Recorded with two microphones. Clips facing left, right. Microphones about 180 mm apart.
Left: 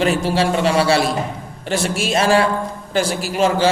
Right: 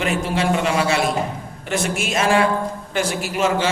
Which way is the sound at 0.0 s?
35° left (ahead or behind).